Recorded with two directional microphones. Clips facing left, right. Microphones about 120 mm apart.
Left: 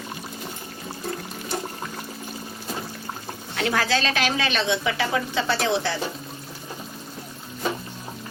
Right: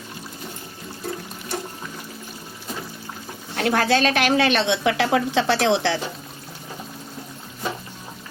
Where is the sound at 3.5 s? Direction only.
50° right (ahead or behind); by 6.0 s 75° right (ahead or behind).